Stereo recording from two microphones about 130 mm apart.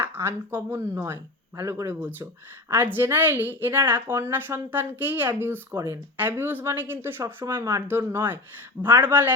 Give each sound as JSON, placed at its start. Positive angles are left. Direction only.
{"t": 0.0, "sound": "a woman's voice", "side_deg": -15}